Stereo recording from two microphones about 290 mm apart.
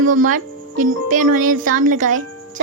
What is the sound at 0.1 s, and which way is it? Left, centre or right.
A woman's voice, right.